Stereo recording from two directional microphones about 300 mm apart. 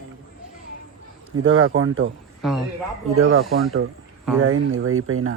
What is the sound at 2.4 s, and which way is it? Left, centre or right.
Speech, centre.